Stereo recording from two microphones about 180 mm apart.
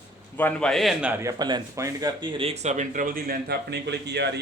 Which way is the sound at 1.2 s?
20° right (ahead or behind).